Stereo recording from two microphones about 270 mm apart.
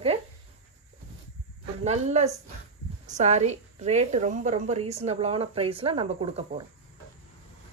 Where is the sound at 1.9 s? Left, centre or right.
Right.